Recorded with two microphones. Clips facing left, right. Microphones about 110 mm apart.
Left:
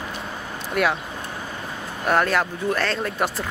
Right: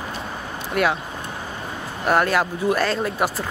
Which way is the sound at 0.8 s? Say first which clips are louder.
Right 1 dB; centre (ahead or behind).